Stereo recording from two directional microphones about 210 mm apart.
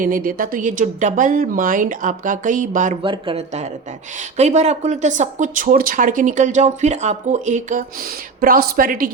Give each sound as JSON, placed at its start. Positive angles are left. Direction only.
{"t": 0.0, "sound": "speech", "side_deg": -40}
{"t": 3.0, "sound": "speech", "side_deg": -25}